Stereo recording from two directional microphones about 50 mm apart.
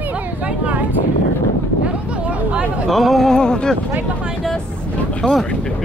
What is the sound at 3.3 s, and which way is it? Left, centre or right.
Speech, centre.